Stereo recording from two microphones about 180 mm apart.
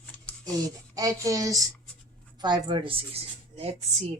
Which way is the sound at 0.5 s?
20° right (ahead or behind).